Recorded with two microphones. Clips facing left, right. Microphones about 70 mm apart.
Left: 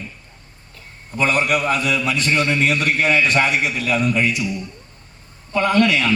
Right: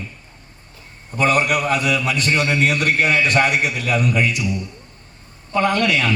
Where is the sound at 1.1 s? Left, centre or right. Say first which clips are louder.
Right 1 dB; right.